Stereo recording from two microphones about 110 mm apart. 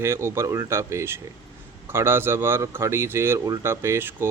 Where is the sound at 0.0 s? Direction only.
25° right (ahead or behind).